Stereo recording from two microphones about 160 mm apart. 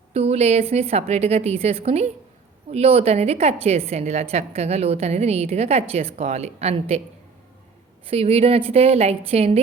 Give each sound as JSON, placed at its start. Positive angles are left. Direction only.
{"t": 0.1, "sound": "a woman's voice", "side_deg": -40}
{"t": 8.1, "sound": "a woman's voice", "side_deg": -40}